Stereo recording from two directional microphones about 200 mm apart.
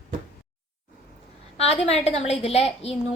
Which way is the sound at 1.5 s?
30° left (ahead or behind).